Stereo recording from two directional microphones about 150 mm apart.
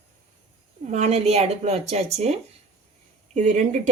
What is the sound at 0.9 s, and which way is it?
A woman's voice, 45° right (ahead or behind).